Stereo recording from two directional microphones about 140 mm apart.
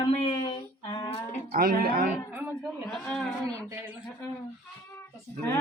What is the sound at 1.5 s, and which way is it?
Speech, 90° right.